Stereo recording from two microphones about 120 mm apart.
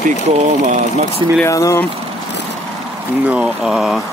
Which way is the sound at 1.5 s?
25° left (ahead or behind).